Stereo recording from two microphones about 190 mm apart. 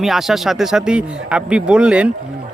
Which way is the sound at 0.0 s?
Centre (ahead or behind).